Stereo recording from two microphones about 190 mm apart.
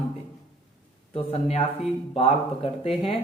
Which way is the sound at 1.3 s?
30° left (ahead or behind).